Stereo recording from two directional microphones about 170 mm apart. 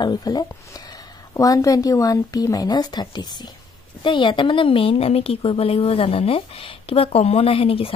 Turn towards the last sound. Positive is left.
turn(degrees=35)  # may be behind; listen again after turning